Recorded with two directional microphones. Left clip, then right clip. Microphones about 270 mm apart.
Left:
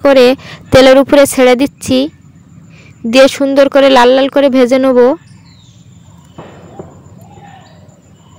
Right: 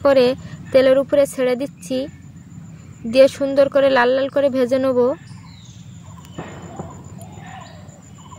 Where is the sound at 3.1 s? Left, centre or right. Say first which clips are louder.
Left 6 dB; left.